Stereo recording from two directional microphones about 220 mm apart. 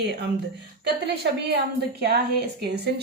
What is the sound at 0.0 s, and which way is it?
Speech, 50° right (ahead or behind).